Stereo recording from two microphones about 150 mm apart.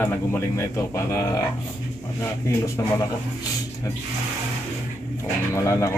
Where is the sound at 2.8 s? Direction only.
15° left (ahead or behind).